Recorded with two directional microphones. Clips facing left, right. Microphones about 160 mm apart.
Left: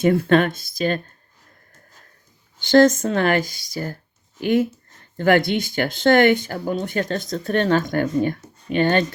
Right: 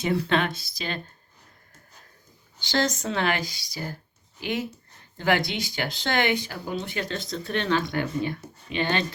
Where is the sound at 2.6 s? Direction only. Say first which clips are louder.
Left 12 dB; 50° left (ahead or behind).